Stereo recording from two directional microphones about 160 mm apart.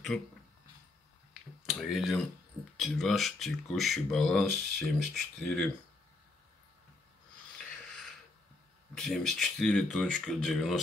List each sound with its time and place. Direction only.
1.7 s speech: centre (ahead or behind)
5.4 s speech: 10° left (ahead or behind)
7.7 s a sound: 5° left (ahead or behind)
8.9 s speech: 5° left (ahead or behind)